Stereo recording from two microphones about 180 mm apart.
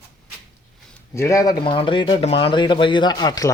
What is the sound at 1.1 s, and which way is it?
Speech, 15° left (ahead or behind).